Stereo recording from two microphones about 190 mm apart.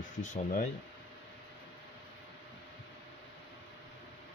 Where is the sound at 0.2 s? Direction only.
45° left (ahead or behind).